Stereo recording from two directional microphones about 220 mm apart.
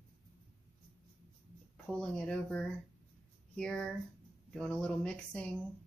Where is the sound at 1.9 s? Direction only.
5° left (ahead or behind).